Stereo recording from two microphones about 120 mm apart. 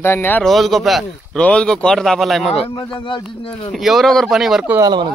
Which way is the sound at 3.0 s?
45° left (ahead or behind).